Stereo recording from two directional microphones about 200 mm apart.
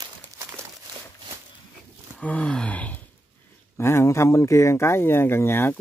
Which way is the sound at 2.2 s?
5° left (ahead or behind).